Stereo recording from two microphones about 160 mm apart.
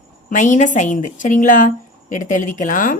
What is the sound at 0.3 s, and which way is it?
A woman's voice, 55° left (ahead or behind).